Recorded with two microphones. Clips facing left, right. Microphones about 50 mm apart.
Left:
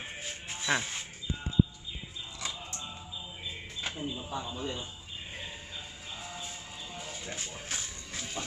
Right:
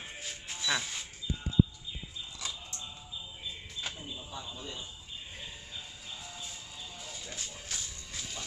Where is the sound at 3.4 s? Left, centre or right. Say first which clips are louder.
Left 2 dB; left.